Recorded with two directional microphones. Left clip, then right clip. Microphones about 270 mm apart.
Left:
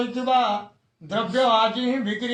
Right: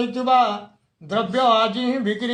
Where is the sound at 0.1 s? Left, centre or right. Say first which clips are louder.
Right 4 dB; right.